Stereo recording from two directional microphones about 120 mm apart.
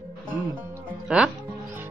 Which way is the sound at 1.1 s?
10° right (ahead or behind).